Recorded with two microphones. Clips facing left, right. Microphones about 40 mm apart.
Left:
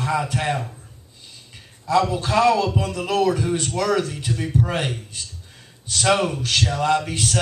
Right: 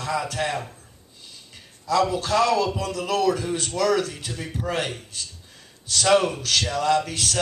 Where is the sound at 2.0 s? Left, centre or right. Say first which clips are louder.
Left 3 dB; centre.